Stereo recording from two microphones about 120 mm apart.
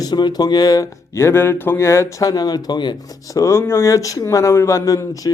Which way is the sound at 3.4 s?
20° left (ahead or behind).